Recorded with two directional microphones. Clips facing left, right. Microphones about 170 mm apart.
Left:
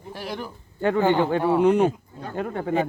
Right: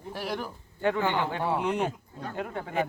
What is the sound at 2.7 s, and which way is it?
Speech, 30° left (ahead or behind).